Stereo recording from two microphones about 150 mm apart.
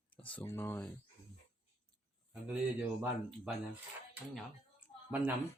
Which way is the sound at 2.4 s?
10° right (ahead or behind).